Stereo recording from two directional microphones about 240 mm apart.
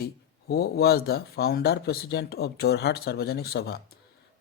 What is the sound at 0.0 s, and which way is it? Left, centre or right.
Speech, left.